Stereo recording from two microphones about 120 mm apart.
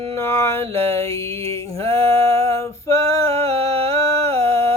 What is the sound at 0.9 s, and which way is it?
Mantra, 25° left (ahead or behind).